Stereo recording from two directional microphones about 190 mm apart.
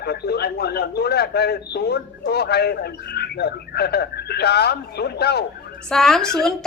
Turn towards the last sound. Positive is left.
turn(degrees=5)  # may be behind; listen again after turning